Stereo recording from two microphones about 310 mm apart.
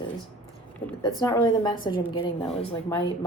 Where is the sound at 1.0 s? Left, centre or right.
Centre.